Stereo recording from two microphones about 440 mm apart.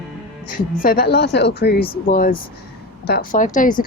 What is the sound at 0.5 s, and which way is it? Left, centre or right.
Speech, centre.